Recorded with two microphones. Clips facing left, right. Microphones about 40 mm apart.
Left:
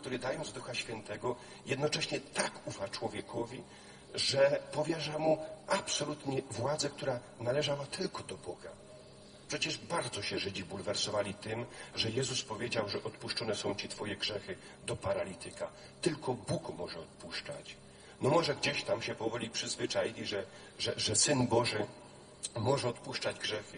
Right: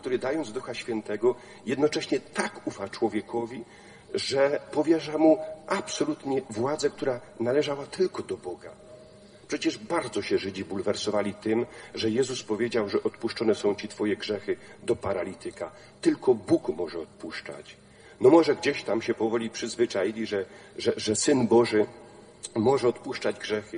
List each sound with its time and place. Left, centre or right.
0.0 s speech: right